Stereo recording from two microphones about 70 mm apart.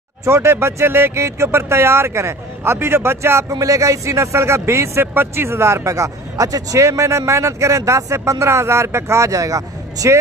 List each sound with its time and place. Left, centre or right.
0.2 s speech: right
3.5 s speech: right